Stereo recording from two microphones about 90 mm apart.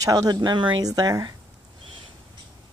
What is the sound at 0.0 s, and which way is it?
Speech, 45° right (ahead or behind).